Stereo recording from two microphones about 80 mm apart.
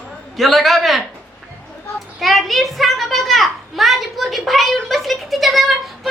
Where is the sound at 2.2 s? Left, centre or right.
Centre.